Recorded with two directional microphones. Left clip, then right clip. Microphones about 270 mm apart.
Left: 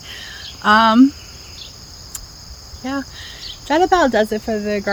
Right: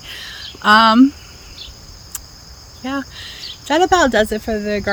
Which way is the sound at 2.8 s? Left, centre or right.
Centre.